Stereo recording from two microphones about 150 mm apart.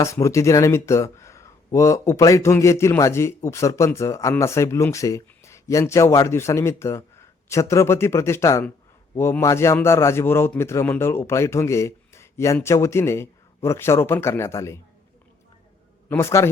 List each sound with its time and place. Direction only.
0.0 s a man's voice: 20° left (ahead or behind)
16.0 s a man's voice: 20° left (ahead or behind)